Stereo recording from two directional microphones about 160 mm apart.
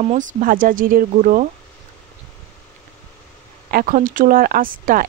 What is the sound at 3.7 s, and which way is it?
Speech, 55° right (ahead or behind).